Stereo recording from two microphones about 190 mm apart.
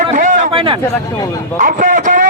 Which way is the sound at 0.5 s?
25° right (ahead or behind).